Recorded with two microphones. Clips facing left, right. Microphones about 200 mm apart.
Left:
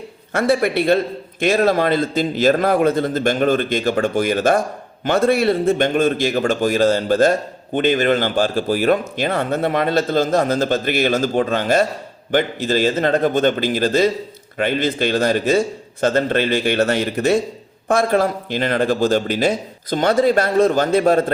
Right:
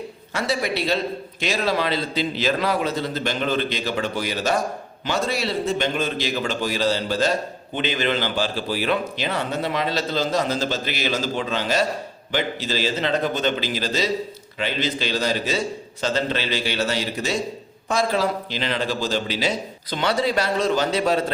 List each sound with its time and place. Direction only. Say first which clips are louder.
0.3 s a man's voice: left 7 dB; 55° left (ahead or behind)